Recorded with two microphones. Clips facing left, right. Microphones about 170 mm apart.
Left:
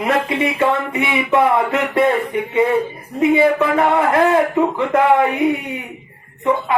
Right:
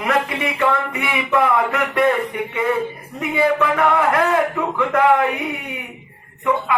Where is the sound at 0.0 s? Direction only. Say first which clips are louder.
Left 3 dB; 25° left (ahead or behind).